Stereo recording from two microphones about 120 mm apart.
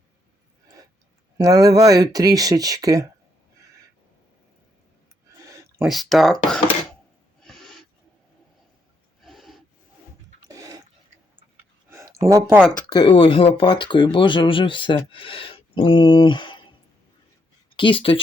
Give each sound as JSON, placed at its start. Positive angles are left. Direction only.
{"t": 1.4, "sound": "speech", "side_deg": -30}
{"t": 5.4, "sound": "a sound", "side_deg": -25}
{"t": 5.8, "sound": "speech", "side_deg": 0}
{"t": 7.4, "sound": "owl", "side_deg": 0}
{"t": 9.2, "sound": "snort", "side_deg": 0}
{"t": 10.4, "sound": "dog", "side_deg": -30}
{"t": 11.9, "sound": "a sound", "side_deg": -25}
{"t": 12.9, "sound": "speech", "side_deg": 40}
{"t": 17.7, "sound": "speech", "side_deg": 45}